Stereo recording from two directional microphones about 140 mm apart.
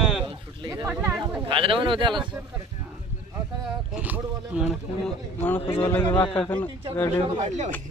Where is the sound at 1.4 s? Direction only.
40° right (ahead or behind).